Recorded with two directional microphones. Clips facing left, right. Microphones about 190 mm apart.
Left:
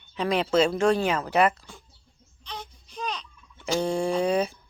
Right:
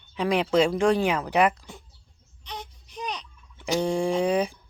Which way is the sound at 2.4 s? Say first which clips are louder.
Right 1 dB; 20° right (ahead or behind).